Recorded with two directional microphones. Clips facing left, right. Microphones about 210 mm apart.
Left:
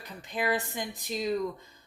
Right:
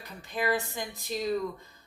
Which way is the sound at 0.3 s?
20° left (ahead or behind).